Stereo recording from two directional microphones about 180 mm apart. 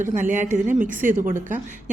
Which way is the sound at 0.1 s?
45° right (ahead or behind).